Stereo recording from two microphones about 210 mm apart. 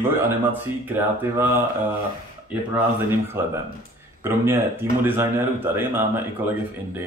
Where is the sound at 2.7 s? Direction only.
10° right (ahead or behind).